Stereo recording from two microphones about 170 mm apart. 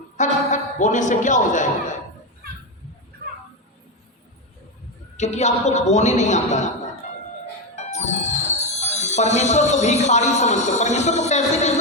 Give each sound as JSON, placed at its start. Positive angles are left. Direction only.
{"t": 0.2, "sound": "a man's voice", "side_deg": 45}
{"t": 5.1, "sound": "a man's voice", "side_deg": 40}
{"t": 7.8, "sound": "speech", "side_deg": 40}